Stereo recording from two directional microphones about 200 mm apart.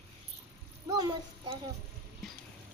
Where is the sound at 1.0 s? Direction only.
20° right (ahead or behind).